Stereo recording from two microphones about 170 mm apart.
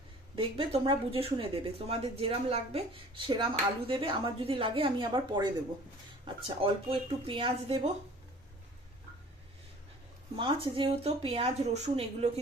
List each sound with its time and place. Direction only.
0.3 s speech: 30° right (ahead or behind)
10.3 s speech: 30° right (ahead or behind)